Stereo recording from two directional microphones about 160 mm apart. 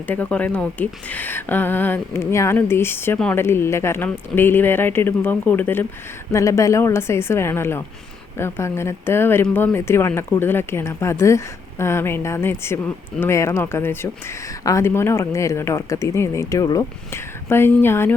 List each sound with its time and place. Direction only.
0.1 s speech: 10° left (ahead or behind)